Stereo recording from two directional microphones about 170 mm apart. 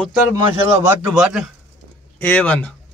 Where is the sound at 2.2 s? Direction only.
10° left (ahead or behind).